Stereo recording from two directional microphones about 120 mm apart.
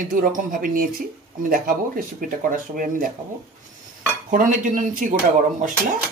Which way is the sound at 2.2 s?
90° right.